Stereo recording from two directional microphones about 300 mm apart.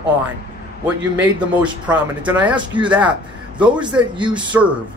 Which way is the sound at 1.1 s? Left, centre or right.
Centre.